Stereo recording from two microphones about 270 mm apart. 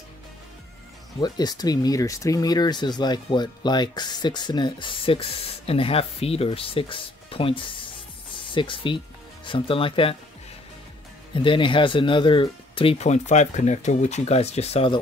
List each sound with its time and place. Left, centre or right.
1.2 s speech: centre
11.3 s speech: centre